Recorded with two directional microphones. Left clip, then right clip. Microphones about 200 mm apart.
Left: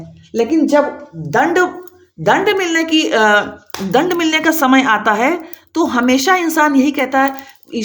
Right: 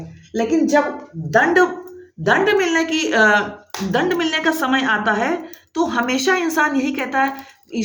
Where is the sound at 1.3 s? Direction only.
45° left (ahead or behind).